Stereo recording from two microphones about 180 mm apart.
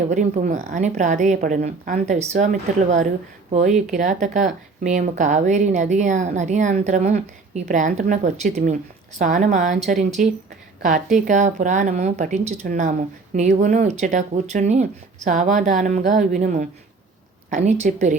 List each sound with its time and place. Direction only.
0.1 s a woman's voice: 40° right (ahead or behind)